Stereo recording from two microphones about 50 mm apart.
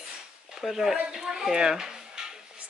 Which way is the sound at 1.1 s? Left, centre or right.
Centre.